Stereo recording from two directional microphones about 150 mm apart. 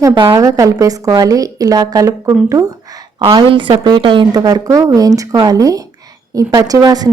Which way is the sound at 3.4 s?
35° right (ahead or behind).